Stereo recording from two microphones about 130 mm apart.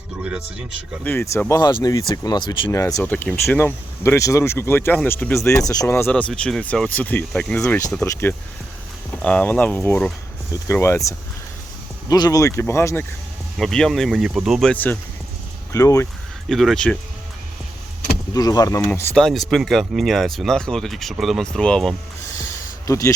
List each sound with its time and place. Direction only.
0.2 s speech: 10° right (ahead or behind)
1.0 s speech: 20° left (ahead or behind)
1.5 s speech: 30° left (ahead or behind)
2.7 s speech: 25° left (ahead or behind); by 7.6 s 5° left (ahead or behind)
7.6 s speech: 25° left (ahead or behind)
13.6 s speech: 5° left (ahead or behind)
14.7 s speech: 15° left (ahead or behind)
15.7 s speech: 25° left (ahead or behind)
16.5 s speech: centre (ahead or behind)
18.3 s speech: 30° left (ahead or behind)
19.2 s speech: centre (ahead or behind)
22.9 s speech: 25° left (ahead or behind)